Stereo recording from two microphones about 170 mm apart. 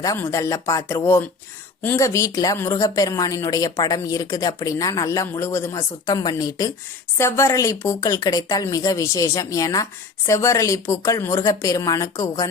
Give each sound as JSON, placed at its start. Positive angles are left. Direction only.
{"t": 0.0, "sound": "speech", "side_deg": 15}